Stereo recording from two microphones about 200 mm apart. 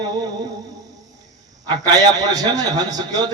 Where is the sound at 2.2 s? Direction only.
20° right (ahead or behind).